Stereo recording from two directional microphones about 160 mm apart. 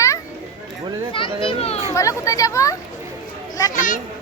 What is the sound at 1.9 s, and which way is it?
Speech, 20° left (ahead or behind).